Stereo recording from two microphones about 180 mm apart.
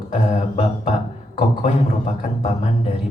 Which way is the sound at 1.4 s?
40° left (ahead or behind).